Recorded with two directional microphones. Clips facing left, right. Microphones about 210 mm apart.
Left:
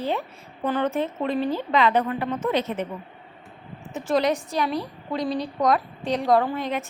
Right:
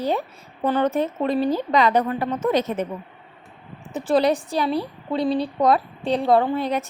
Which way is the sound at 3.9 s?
35° right (ahead or behind).